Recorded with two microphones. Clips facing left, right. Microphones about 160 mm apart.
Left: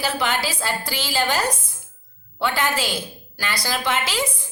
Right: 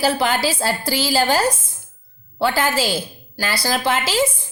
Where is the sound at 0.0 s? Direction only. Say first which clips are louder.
Right 5 dB; 35° right (ahead or behind).